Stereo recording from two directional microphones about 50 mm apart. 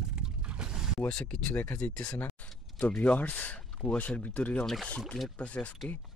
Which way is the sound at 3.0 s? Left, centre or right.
Left.